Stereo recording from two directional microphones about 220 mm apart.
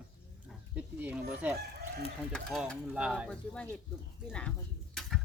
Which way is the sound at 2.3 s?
5° left (ahead or behind).